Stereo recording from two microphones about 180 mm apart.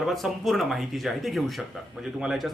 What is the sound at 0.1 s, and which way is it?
A man's voice, centre (ahead or behind).